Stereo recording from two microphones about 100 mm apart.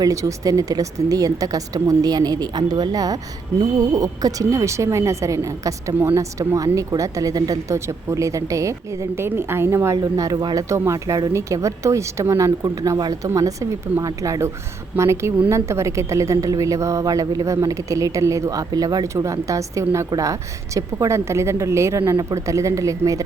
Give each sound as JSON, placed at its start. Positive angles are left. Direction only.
{"t": 0.0, "sound": "a woman's voice", "side_deg": -30}